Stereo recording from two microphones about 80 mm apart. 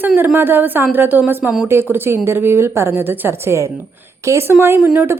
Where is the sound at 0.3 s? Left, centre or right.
Right.